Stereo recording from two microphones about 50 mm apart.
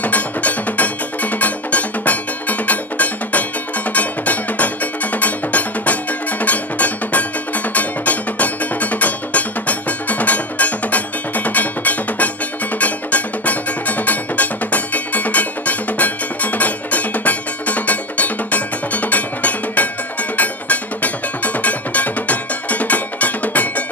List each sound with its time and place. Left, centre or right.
0.0 s music: left